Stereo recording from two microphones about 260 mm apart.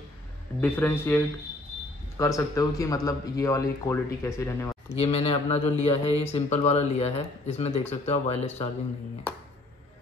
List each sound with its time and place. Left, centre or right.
0.6 s speech: centre
4.9 s speech: left